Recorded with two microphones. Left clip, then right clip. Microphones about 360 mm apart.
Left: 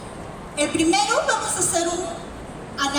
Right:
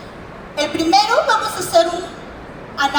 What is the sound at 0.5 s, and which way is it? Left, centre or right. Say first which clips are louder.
A woman's voice: right 5 dB; centre.